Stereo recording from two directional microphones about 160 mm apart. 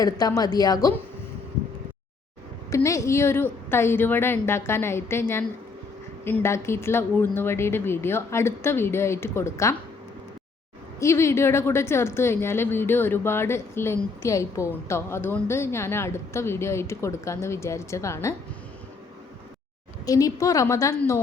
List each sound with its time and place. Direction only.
0.0 s a woman's voice: 20° left (ahead or behind)
2.6 s a woman's voice: 20° left (ahead or behind)
11.0 s a woman's voice: 15° left (ahead or behind)
20.1 s a woman's voice: 20° left (ahead or behind)